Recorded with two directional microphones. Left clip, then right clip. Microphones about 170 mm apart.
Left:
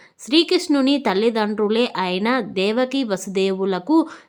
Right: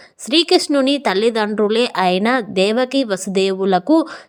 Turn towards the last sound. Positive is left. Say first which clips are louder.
# right 4 dB
turn(degrees=-30)  # may be behind; listen again after turning